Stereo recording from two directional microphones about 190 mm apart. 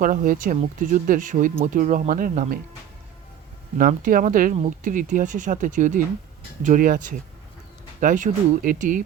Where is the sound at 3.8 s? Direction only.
45° right (ahead or behind).